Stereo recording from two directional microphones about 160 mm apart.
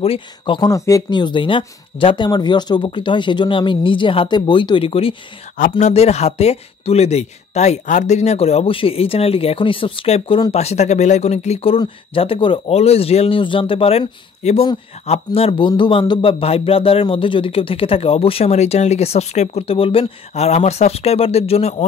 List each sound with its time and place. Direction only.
0.0 s speech: 35° left (ahead or behind)